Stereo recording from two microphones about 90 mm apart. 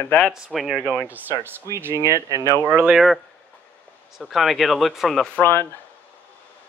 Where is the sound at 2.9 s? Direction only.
Centre (ahead or behind).